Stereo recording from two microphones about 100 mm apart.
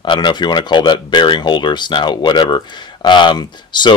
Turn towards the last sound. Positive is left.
turn(degrees=50)  # may be behind; listen again after turning